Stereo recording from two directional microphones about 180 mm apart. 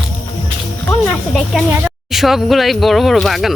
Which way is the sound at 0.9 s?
5° left (ahead or behind).